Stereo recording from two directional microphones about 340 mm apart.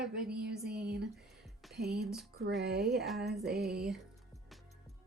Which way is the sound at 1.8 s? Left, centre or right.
Right.